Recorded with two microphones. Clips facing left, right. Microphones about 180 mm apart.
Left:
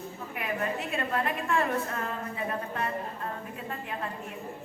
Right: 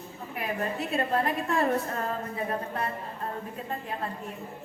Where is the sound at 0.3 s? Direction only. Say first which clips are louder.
Right 1 dB; 35° right (ahead or behind).